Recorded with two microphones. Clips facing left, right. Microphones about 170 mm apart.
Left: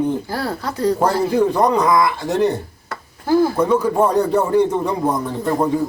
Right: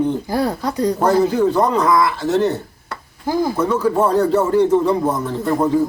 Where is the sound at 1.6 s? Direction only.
15° left (ahead or behind).